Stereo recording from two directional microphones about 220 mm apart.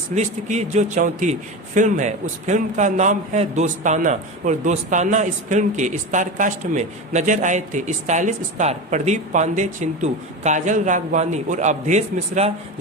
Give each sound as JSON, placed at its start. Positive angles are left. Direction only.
{"t": 0.1, "sound": "a man's voice", "side_deg": -35}